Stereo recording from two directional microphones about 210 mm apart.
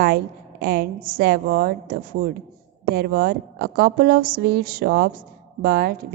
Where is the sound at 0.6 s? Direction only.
45° right (ahead or behind).